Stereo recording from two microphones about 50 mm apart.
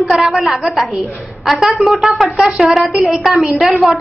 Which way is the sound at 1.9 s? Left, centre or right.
Centre.